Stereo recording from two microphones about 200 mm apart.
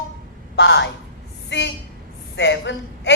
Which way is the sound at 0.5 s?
60° left (ahead or behind).